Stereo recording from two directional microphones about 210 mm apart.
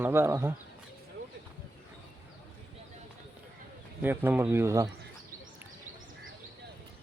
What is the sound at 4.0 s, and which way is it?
Speech, 10° right (ahead or behind).